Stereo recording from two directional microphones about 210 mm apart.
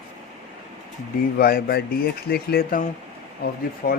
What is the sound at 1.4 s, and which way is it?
Speech, 45° left (ahead or behind).